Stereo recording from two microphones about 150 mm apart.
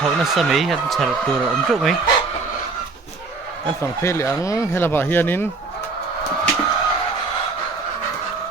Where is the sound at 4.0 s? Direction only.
20° left (ahead or behind).